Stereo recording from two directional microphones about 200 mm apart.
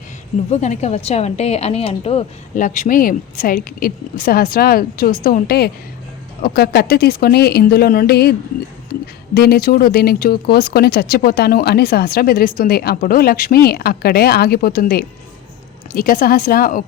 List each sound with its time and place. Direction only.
0.5 s a woman's voice: 35° left (ahead or behind)